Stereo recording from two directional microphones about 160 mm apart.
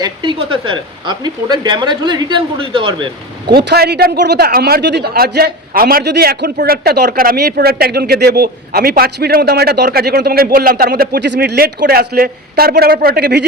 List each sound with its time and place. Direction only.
0.0 s speech: 30° right (ahead or behind)
3.5 s a man's voice: 85° right